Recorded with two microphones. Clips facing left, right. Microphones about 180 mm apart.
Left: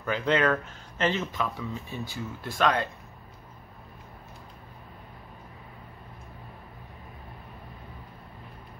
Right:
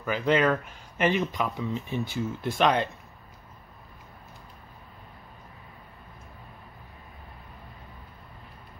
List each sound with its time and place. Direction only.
0.0 s speech: 10° right (ahead or behind)